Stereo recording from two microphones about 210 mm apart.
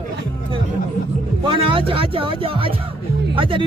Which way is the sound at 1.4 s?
25° right (ahead or behind).